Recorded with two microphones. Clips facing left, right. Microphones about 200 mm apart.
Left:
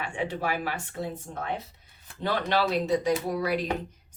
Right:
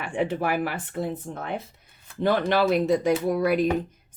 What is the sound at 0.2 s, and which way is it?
Speech, 55° right (ahead or behind).